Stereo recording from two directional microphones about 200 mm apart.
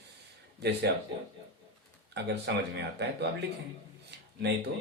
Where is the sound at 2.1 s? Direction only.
55° right (ahead or behind).